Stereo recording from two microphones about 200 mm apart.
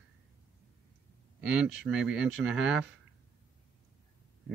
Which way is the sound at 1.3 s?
5° right (ahead or behind).